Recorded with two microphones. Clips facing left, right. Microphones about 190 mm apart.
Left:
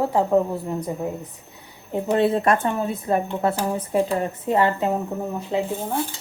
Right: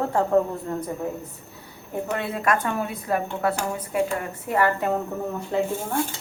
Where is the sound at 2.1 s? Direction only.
30° left (ahead or behind).